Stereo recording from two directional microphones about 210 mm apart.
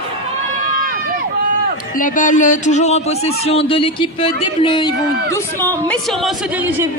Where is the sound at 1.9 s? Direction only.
40° left (ahead or behind).